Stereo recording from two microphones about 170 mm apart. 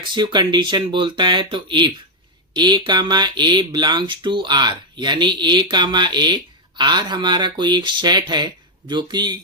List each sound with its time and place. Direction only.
0.1 s speech: 25° right (ahead or behind)